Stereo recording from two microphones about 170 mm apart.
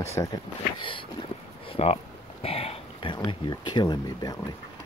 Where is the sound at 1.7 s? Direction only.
35° left (ahead or behind).